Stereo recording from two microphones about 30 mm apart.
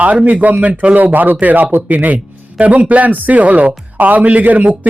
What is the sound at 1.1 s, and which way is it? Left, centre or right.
Speech, right.